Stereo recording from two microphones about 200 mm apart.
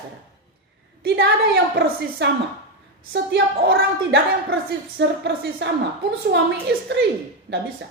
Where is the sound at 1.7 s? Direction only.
55° right (ahead or behind).